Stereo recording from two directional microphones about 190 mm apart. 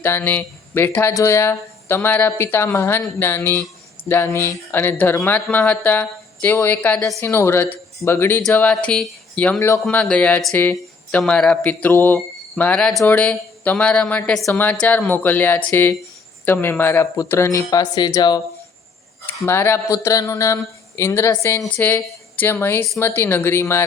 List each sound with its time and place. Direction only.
0.0 s speech: 10° left (ahead or behind)